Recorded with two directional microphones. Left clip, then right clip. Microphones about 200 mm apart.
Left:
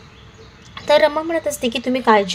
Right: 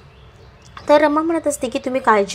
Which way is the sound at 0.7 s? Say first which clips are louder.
Right 1 dB; 20° right (ahead or behind).